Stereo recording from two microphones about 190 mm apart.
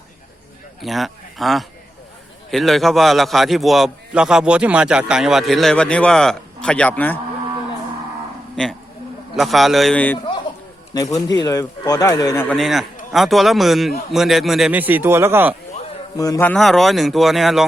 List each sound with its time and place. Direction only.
0.8 s a man's voice: centre (ahead or behind)
9.3 s a man's voice: centre (ahead or behind)
10.9 s speech: 20° left (ahead or behind)
12.5 s a man's voice: centre (ahead or behind)
16.1 s speech: 20° left (ahead or behind)
16.5 s a man's voice: centre (ahead or behind)